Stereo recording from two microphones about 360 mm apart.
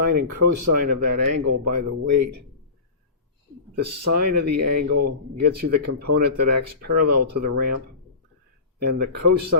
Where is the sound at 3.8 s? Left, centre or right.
Right.